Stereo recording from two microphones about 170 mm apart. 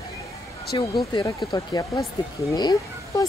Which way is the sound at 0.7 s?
25° left (ahead or behind).